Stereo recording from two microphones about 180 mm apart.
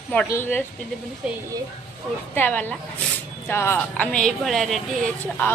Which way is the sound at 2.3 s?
10° left (ahead or behind).